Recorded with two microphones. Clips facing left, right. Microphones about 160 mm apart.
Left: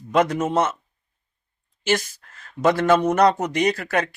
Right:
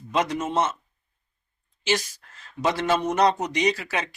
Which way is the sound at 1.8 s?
50° left (ahead or behind).